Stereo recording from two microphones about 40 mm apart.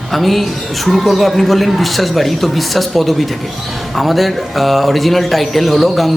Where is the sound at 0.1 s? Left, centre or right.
Centre.